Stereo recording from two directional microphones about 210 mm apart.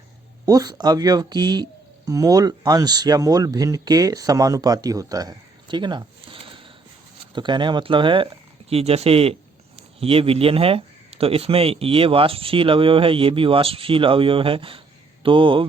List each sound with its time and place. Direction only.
0.4 s speech: 20° right (ahead or behind)